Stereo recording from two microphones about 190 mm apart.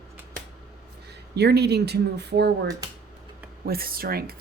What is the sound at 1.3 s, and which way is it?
Speech, 60° right (ahead or behind).